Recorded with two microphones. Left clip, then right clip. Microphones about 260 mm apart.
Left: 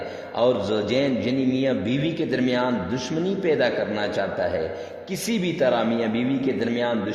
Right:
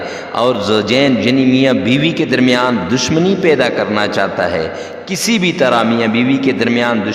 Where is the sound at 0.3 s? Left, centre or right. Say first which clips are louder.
Right 8 dB; right.